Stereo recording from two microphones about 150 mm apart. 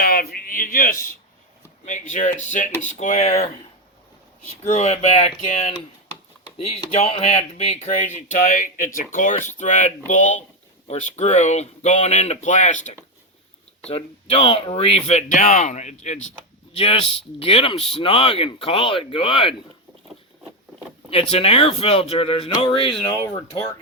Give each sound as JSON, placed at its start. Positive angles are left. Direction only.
{"t": 0.0, "sound": "speech", "side_deg": 85}
{"t": 1.8, "sound": "speech", "side_deg": 55}
{"t": 4.6, "sound": "speech", "side_deg": 50}
{"t": 6.9, "sound": "speech", "side_deg": 45}
{"t": 13.9, "sound": "speech", "side_deg": 40}
{"t": 21.1, "sound": "speech", "side_deg": 40}